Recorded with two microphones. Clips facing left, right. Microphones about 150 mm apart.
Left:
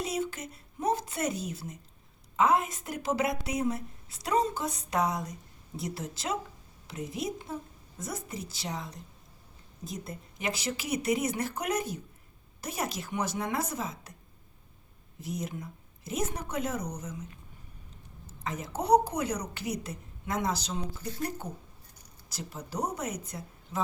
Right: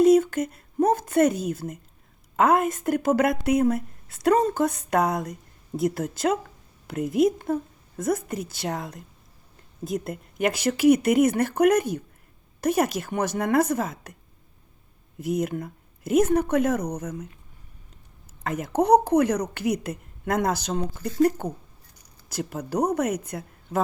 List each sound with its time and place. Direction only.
0.0 s a woman's voice: 50° right (ahead or behind)
15.2 s a woman's voice: 60° right (ahead or behind)
18.4 s a woman's voice: 60° right (ahead or behind); by 21.4 s 80° right
22.4 s a woman's voice: 60° right (ahead or behind)